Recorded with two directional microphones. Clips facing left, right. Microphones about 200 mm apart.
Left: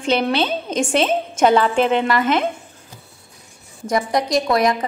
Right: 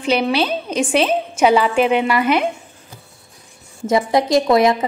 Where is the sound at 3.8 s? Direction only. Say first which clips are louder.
Right 4 dB; 25° right (ahead or behind).